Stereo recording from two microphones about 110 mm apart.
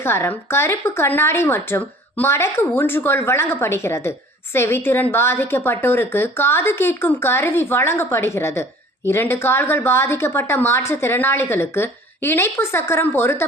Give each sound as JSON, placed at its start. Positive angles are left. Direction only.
{"t": 0.0, "sound": "a woman's voice", "side_deg": 20}